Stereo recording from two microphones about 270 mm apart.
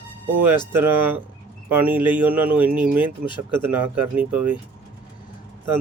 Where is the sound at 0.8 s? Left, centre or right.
Centre.